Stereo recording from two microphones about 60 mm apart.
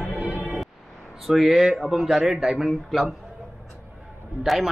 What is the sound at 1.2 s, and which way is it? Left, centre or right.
A man's voice, centre.